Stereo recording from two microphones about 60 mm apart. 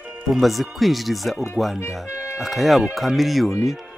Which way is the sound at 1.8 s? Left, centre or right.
Left.